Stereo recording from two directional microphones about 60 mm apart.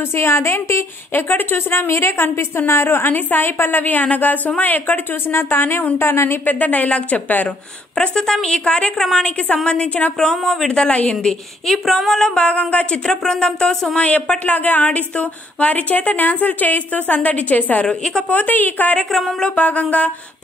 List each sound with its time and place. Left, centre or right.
0.1 s a woman's voice: left
1.1 s a woman's voice: left
6.4 s speech: left
8.0 s a woman's voice: centre
11.6 s a woman's voice: centre
13.1 s a woman's voice: centre; by 17.8 s left
17.8 s a woman's voice: centre
18.3 s speech: left
19.1 s speech: centre
19.5 s speech: left